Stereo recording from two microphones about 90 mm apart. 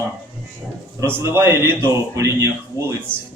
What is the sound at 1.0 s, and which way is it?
A man's voice, 25° right (ahead or behind).